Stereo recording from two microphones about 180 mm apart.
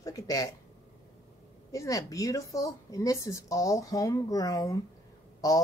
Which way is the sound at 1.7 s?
20° left (ahead or behind).